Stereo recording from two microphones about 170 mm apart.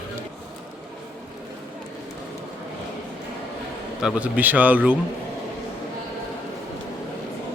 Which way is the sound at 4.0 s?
5° right (ahead or behind).